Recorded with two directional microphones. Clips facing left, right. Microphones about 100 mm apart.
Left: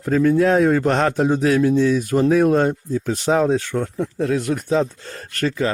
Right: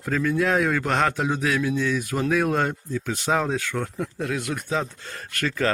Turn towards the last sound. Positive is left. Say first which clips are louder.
# left 5 dB
turn(degrees=35)  # may be behind; listen again after turning